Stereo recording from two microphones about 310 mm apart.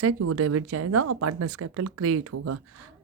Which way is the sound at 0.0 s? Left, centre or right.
Right.